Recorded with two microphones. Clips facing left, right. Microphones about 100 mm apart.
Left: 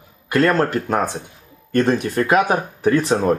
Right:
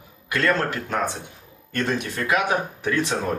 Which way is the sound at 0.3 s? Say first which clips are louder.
Left 6 dB; 40° left (ahead or behind).